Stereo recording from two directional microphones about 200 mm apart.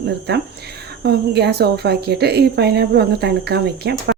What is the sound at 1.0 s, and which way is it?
Speech, 55° right (ahead or behind).